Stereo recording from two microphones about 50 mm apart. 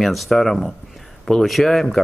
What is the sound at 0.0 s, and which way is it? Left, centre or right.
Speech, centre.